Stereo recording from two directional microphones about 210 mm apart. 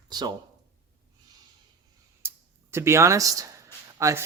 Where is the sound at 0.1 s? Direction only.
20° right (ahead or behind).